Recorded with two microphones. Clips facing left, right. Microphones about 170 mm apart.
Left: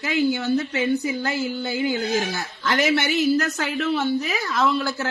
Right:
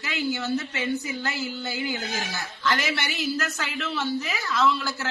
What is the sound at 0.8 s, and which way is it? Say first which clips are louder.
Speech: left 6 dB; 45° left (ahead or behind).